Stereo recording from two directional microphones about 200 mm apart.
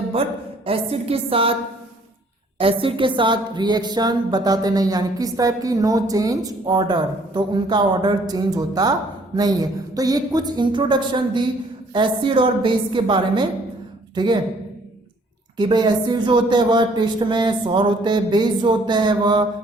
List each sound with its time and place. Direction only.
0.6 s speech: 30° right (ahead or behind)
2.6 s speech: 25° right (ahead or behind)
15.5 s speech: 20° right (ahead or behind)